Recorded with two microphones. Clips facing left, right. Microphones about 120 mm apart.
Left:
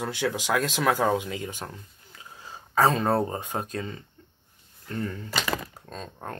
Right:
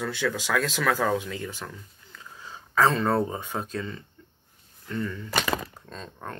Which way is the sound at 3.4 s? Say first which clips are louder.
Even; 45° left (ahead or behind).